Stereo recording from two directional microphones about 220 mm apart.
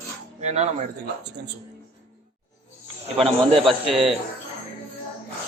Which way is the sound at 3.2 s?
25° right (ahead or behind).